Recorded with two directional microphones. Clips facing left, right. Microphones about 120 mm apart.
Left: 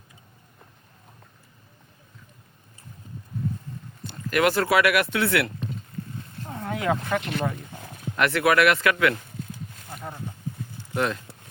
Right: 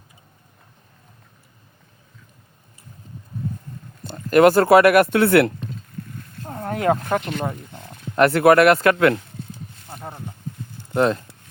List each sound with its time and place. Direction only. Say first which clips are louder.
4.0 s speech: right 9 dB; 40° right (ahead or behind)
6.5 s a sound: right 5 dB; 45° right (ahead or behind)
8.1 s speech: right 7 dB; 40° right (ahead or behind)
10.9 s speech: right 7 dB; 35° right (ahead or behind)